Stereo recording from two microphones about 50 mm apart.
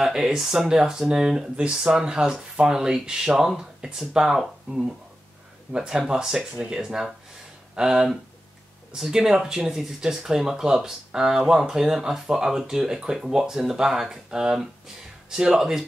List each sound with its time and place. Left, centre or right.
0.0 s speech: centre